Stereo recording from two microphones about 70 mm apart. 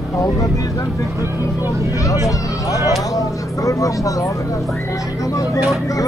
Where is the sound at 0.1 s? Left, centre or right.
Left.